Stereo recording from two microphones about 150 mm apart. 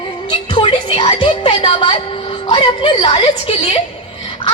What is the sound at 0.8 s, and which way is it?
A woman's voice, 40° left (ahead or behind).